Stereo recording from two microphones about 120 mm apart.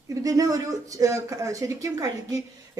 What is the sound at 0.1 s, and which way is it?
Speech, 30° right (ahead or behind).